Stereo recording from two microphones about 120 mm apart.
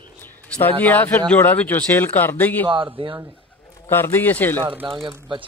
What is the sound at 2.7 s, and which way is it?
Speech, 45° right (ahead or behind).